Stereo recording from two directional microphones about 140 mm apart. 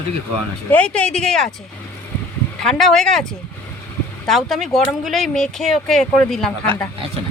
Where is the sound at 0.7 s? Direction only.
10° left (ahead or behind).